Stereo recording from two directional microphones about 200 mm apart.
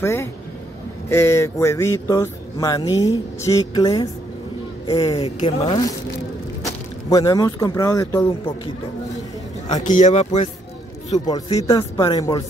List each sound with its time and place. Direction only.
0.0 s speech: 10° left (ahead or behind)
5.2 s speech: 30° left (ahead or behind); by 8.5 s 15° left (ahead or behind)
9.8 s speech: 40° left (ahead or behind)
11.1 s speech: 20° left (ahead or behind)